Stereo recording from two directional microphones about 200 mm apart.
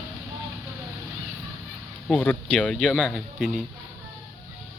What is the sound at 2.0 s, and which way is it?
Speech, 5° left (ahead or behind).